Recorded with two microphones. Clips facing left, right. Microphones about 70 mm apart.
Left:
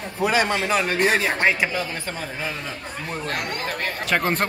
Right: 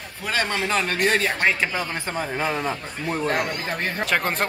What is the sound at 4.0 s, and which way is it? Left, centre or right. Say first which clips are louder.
Speech: left 2 dB; centre.